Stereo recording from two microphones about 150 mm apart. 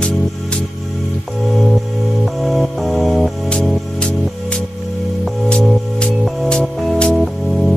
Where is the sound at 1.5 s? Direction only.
Centre (ahead or behind).